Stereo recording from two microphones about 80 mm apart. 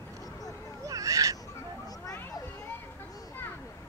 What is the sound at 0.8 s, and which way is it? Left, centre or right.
Owl, right.